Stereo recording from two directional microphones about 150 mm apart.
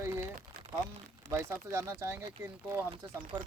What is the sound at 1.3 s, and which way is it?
Speech, 20° right (ahead or behind).